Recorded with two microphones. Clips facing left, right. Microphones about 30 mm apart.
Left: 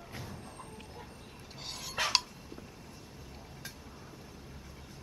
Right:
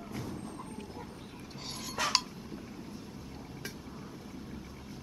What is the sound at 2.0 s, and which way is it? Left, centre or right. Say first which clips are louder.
Dishes: even; left.